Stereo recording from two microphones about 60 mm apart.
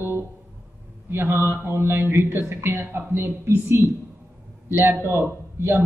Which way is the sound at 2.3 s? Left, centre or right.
Right.